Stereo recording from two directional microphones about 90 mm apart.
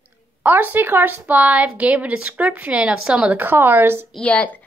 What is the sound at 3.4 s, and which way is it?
Speech, 20° right (ahead or behind).